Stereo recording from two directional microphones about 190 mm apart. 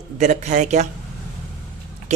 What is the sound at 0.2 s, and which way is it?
Speech, 40° right (ahead or behind).